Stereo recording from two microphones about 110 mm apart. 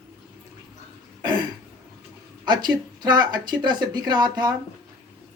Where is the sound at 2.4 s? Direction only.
40° right (ahead or behind).